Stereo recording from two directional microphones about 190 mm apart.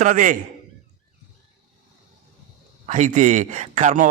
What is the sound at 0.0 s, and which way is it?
Speech, 40° right (ahead or behind).